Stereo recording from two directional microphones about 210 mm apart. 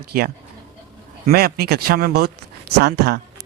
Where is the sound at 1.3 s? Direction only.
45° right (ahead or behind).